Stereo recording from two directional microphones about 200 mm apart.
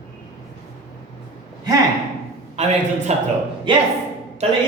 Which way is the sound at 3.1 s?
35° right (ahead or behind).